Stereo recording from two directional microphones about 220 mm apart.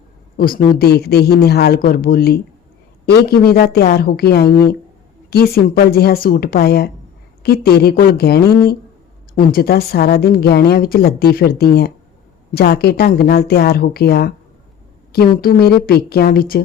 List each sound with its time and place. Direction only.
0.3 s a woman's voice: 40° left (ahead or behind)
15.4 s a woman's voice: 45° left (ahead or behind)